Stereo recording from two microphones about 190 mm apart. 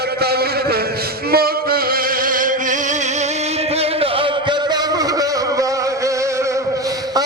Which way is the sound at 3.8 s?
30° right (ahead or behind).